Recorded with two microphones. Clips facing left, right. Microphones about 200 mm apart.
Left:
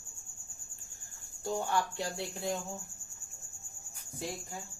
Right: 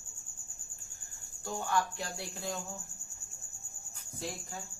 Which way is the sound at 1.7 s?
25° left (ahead or behind).